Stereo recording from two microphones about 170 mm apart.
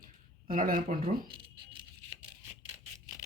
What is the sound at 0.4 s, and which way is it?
Speech, 50° right (ahead or behind).